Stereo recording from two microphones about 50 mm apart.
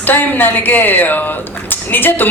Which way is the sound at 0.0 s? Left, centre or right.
Left.